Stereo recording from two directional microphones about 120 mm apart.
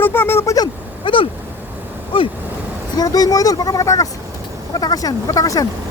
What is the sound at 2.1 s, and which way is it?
Vehicle, 45° left (ahead or behind).